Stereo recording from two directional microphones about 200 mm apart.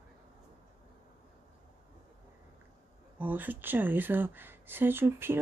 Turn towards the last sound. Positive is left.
turn(degrees=-10)  # may be behind; listen again after turning